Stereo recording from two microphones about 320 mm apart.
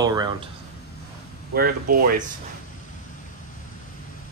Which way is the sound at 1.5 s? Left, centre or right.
Right.